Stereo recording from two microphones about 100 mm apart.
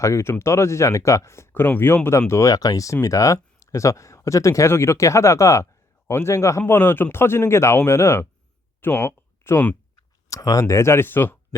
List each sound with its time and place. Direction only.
0.0 s speech: 30° left (ahead or behind)
9.9 s speech: 35° left (ahead or behind)